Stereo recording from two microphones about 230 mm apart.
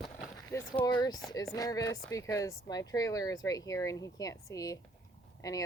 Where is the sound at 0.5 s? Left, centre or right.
Centre.